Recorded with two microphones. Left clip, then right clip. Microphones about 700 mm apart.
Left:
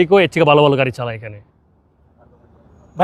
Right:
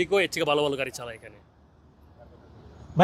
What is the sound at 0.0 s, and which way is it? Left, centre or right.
Speech, left.